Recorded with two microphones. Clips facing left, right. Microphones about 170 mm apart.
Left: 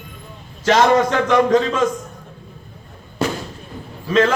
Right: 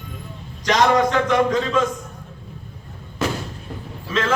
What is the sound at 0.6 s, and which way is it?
Speech, 45° left (ahead or behind).